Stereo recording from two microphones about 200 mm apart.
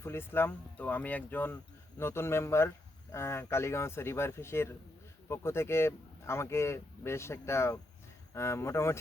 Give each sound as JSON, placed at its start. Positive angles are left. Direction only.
{"t": 0.0, "sound": "speech", "side_deg": 10}